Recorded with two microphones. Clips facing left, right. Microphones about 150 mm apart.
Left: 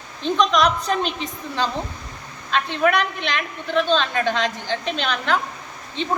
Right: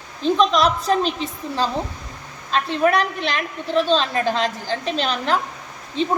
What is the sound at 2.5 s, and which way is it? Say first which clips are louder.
A woman's voice: right 1 dB; 35° right (ahead or behind).